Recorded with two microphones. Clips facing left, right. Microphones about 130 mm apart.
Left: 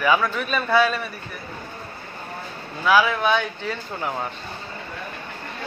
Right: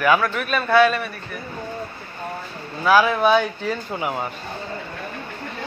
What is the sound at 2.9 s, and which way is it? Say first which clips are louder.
Speech: right 3 dB; 10° right (ahead or behind).